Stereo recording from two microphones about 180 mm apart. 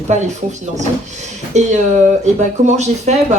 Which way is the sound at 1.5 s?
40° right (ahead or behind).